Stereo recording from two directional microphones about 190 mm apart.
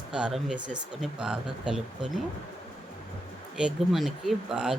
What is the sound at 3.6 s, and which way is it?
Speech, centre (ahead or behind).